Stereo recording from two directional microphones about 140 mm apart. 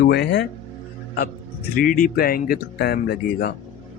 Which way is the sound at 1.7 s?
90° left.